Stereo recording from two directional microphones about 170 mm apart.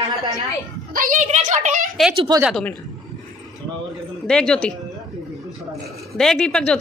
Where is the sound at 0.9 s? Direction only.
50° right (ahead or behind).